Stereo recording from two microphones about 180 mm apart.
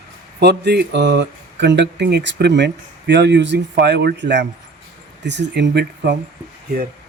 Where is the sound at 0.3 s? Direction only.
65° right (ahead or behind).